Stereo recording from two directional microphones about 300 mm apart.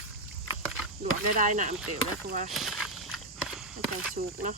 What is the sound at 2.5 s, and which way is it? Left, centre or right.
Walk, centre.